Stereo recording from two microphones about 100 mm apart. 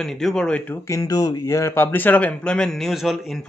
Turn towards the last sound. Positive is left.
turn(degrees=0)  # may be behind; listen again after turning